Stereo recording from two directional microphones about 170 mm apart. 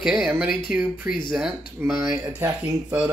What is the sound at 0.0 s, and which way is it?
Speech, 5° right (ahead or behind).